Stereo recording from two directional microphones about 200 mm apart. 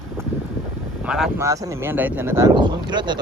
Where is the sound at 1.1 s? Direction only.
Centre (ahead or behind).